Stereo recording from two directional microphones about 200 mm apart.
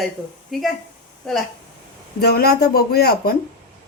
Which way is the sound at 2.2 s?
50° left (ahead or behind).